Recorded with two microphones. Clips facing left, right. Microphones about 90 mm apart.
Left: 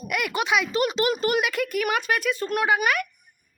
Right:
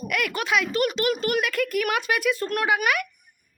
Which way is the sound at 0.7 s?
30° left (ahead or behind).